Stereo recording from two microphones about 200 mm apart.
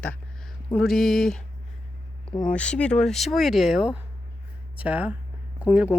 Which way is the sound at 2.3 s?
25° left (ahead or behind).